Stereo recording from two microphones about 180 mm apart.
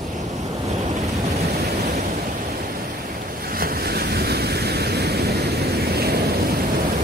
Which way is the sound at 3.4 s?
55° right (ahead or behind).